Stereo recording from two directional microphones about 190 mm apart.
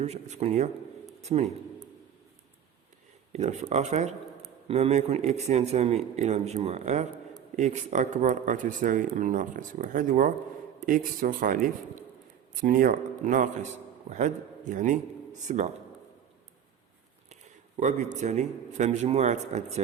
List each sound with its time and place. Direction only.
0.0 s a man's voice: 35° right (ahead or behind)
3.3 s a man's voice: 35° right (ahead or behind)
17.7 s a man's voice: 40° right (ahead or behind)